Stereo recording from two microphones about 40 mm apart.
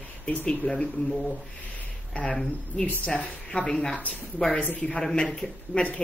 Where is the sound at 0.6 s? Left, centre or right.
Left.